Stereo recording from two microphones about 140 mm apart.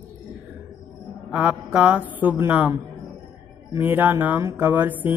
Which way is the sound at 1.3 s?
10° right (ahead or behind).